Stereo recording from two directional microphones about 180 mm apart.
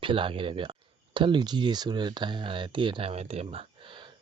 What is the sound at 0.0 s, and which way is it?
Speech, 30° right (ahead or behind).